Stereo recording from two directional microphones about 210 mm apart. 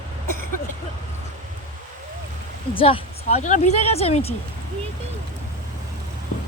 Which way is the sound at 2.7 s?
25° left (ahead or behind).